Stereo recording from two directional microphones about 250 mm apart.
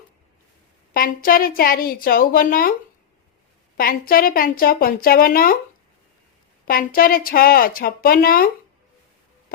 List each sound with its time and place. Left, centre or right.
0.9 s speech: left
3.8 s speech: left
6.7 s speech: left